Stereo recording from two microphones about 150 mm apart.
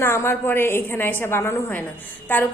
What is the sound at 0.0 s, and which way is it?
A woman's voice, 15° left (ahead or behind).